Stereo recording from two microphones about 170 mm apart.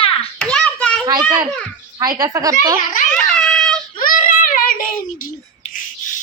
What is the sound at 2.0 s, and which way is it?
Speech, 20° right (ahead or behind).